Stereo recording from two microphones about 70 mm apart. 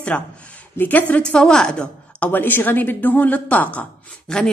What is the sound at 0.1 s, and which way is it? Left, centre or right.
A woman's voice, centre.